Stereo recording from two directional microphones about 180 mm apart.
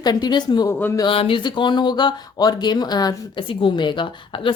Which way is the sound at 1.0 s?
30° left (ahead or behind).